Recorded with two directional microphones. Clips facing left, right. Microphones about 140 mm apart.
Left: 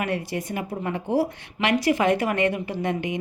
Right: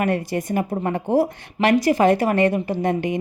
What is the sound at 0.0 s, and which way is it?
A woman's voice, 45° right (ahead or behind).